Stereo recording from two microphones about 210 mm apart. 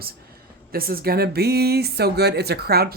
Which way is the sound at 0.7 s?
45° right (ahead or behind).